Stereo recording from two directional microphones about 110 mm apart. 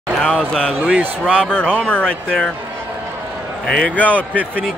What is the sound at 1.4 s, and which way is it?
Speech, 10° left (ahead or behind).